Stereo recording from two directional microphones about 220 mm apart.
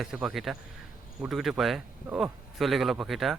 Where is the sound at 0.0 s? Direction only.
Centre (ahead or behind).